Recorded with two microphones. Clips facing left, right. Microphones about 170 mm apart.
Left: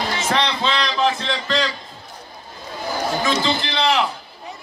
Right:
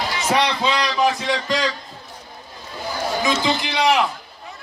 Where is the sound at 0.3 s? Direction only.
10° right (ahead or behind).